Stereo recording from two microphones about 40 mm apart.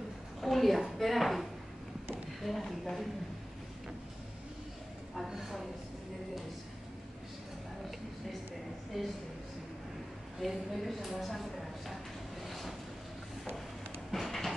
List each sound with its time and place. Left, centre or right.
0.4 s a sound: centre
0.9 s speech: centre
5.1 s speech: centre
9.0 s speech: centre
10.4 s speech: centre
12.4 s vehicle: centre
14.1 s train: centre